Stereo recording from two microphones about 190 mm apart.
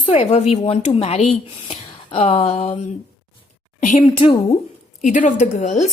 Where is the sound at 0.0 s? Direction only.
35° left (ahead or behind).